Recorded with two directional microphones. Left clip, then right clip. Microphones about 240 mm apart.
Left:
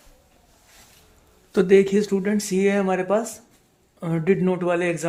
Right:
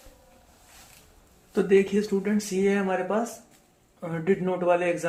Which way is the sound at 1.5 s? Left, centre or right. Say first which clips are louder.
Left 5 dB; left.